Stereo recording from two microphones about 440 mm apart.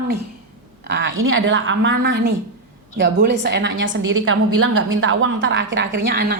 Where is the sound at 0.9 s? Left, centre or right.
Right.